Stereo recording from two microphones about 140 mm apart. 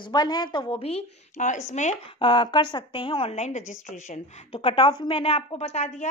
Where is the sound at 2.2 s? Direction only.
35° left (ahead or behind); by 4.6 s 60° left (ahead or behind).